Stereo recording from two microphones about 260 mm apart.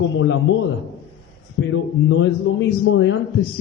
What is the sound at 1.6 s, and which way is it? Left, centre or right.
A man's voice, left.